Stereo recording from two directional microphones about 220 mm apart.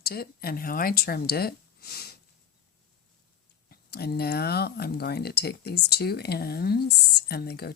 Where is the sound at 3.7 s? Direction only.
45° left (ahead or behind).